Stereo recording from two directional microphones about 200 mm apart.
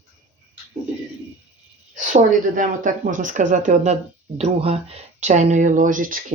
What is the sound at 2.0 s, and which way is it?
Speech, 40° right (ahead or behind).